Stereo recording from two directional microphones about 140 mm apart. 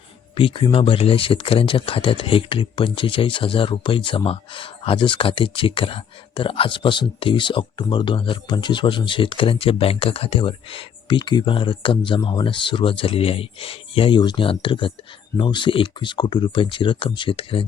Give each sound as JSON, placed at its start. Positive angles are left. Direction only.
{"t": 0.3, "sound": "speech", "side_deg": 40}